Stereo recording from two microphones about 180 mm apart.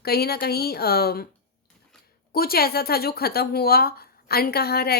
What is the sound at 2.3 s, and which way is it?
Speech, 55° left (ahead or behind).